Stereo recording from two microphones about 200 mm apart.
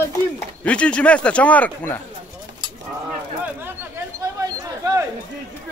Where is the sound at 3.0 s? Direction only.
10° right (ahead or behind).